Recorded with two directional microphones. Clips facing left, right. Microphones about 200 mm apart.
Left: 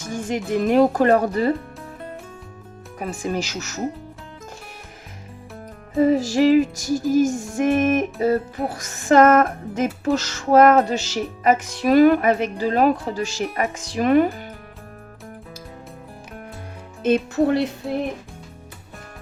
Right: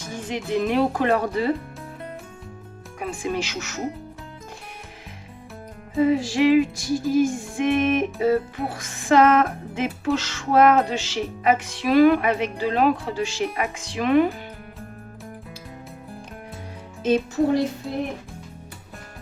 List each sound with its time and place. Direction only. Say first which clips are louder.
0.1 s speech: left 3 dB; 45° left (ahead or behind)
3.0 s music: left 1 dB; 40° left (ahead or behind)
6.0 s music: left 2 dB; 40° left (ahead or behind)
17.0 s speech: left 2 dB; 60° left (ahead or behind)